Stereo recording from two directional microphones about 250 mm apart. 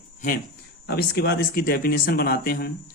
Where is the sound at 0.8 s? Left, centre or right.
Left.